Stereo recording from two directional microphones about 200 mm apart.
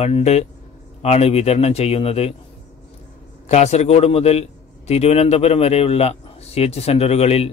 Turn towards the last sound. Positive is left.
turn(degrees=30)  # may be behind; listen again after turning